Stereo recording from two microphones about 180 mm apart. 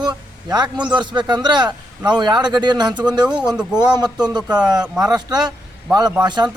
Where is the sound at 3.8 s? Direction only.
25° right (ahead or behind).